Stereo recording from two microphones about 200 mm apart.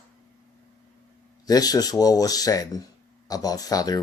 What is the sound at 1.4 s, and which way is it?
Speech, 20° left (ahead or behind).